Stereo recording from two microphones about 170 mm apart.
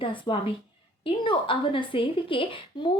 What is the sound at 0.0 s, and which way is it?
A woman's voice, 30° left (ahead or behind).